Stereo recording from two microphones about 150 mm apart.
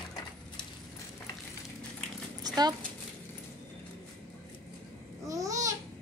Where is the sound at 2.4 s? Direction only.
25° right (ahead or behind).